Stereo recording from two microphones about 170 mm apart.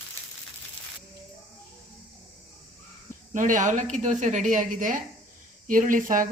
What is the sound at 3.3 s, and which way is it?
A woman's voice, 50° right (ahead or behind).